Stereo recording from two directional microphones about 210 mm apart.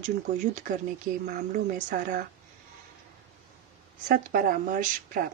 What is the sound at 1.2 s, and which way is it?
Speech, 40° right (ahead or behind).